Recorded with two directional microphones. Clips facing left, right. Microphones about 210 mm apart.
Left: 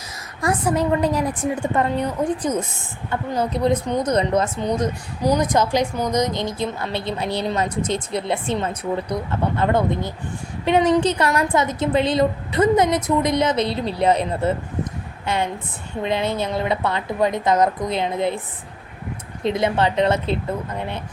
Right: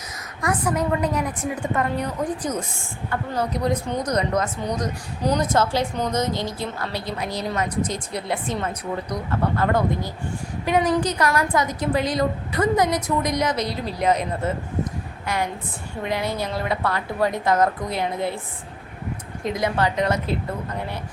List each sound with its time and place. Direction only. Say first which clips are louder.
0.4 s a woman's voice: left 3 dB; 30° left (ahead or behind)
5.2 s a woman's voice: left 2 dB; 15° left (ahead or behind)
19.5 s a woman's voice: left 3 dB; 25° left (ahead or behind)